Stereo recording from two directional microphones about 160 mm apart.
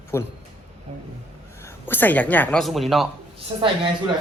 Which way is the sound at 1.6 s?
10° left (ahead or behind).